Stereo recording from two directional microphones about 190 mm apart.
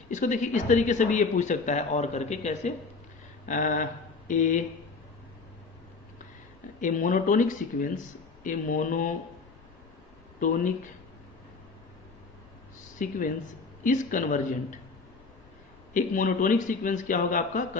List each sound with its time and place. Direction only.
0.1 s a man's voice: 40° left (ahead or behind)
6.7 s a man's voice: 45° left (ahead or behind)
13.0 s a man's voice: 45° left (ahead or behind)
15.9 s a man's voice: 45° left (ahead or behind)